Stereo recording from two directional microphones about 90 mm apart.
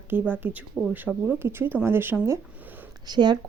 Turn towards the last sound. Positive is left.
turn(degrees=-55)  # may be behind; listen again after turning